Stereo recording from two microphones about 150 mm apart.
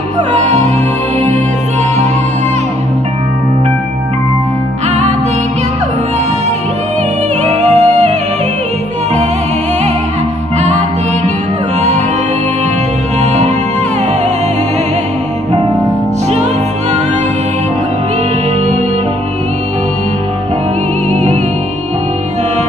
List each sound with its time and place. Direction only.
7.6 s music: 45° right (ahead or behind)
21.1 s music: 45° right (ahead or behind)